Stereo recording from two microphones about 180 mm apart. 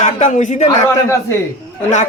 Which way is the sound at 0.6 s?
15° left (ahead or behind).